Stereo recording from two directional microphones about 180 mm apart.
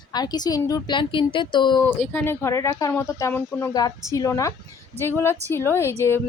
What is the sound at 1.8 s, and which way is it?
Speech, 5° left (ahead or behind).